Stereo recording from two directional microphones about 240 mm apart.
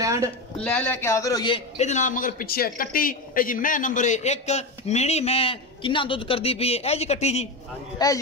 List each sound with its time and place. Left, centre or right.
0.0 s a sound: centre
0.6 s a man's voice: centre; by 7.4 s left
8.0 s a man's voice: centre